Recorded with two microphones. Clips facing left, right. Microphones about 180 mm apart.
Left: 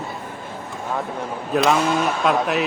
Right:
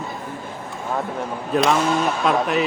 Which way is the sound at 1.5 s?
Centre (ahead or behind).